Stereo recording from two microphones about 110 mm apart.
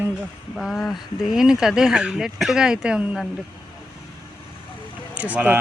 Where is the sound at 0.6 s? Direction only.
Centre (ahead or behind).